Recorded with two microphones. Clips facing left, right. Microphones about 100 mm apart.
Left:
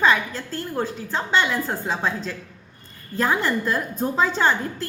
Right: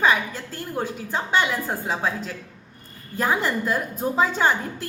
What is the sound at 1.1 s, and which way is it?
Speech, 10° right (ahead or behind).